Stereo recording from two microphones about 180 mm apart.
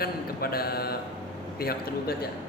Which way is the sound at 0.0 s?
60° left (ahead or behind).